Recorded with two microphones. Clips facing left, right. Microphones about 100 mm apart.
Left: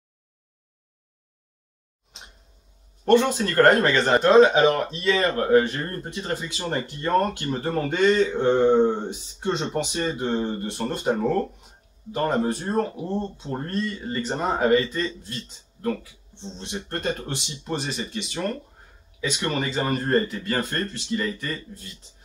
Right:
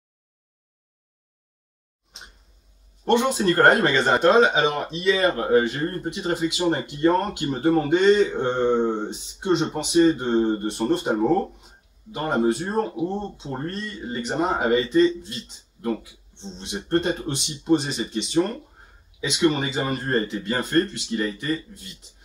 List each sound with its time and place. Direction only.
3.1 s speech: 15° right (ahead or behind)
10.2 s speech: 30° right (ahead or behind)
10.7 s speech: 20° right (ahead or behind)
13.7 s speech: 5° right (ahead or behind)
14.0 s speech: 15° right (ahead or behind)